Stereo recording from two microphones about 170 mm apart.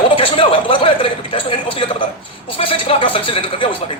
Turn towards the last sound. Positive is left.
turn(degrees=30)  # may be behind; listen again after turning